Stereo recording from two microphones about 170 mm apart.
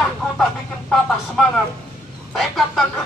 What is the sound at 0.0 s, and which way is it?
Speech, centre (ahead or behind).